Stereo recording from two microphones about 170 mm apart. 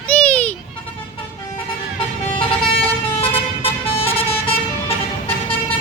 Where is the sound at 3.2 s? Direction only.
35° left (ahead or behind).